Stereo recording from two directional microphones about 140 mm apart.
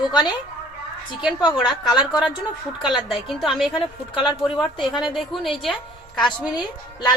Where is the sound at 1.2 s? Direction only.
5° right (ahead or behind).